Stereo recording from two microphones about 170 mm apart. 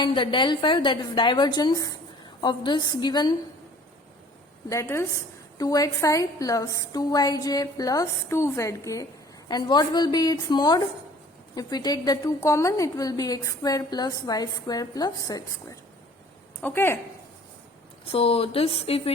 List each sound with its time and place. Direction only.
0.0 s a woman's voice: 30° left (ahead or behind)
4.7 s a woman's voice: 15° left (ahead or behind)
18.0 s speech: 35° left (ahead or behind)